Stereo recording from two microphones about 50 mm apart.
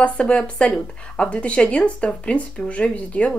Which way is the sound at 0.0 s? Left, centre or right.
Left.